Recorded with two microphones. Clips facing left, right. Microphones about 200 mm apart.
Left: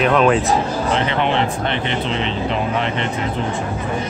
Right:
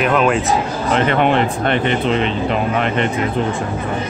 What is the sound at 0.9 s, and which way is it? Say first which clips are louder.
Speech: right 6 dB; 50° right (ahead or behind).